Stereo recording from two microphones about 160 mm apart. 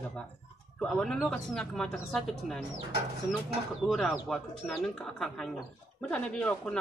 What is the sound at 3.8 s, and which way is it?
Speech, centre (ahead or behind).